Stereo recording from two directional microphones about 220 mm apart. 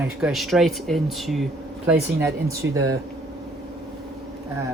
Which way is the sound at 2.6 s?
60° right (ahead or behind).